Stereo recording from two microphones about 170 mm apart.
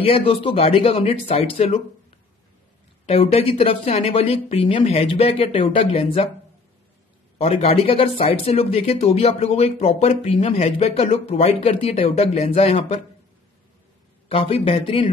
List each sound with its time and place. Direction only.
0.0 s speech: 35° left (ahead or behind)
3.1 s speech: 35° left (ahead or behind)
7.3 s speech: 35° left (ahead or behind)
14.3 s speech: 30° left (ahead or behind)